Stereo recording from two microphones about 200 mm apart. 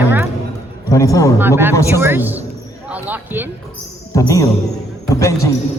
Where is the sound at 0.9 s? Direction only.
15° left (ahead or behind).